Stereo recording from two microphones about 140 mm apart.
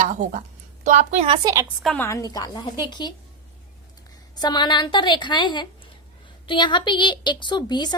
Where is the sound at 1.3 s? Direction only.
25° right (ahead or behind).